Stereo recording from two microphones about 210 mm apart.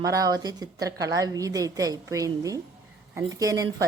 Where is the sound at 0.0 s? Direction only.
15° right (ahead or behind).